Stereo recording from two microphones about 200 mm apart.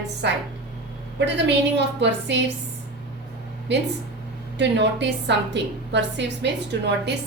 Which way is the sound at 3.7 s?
60° right (ahead or behind).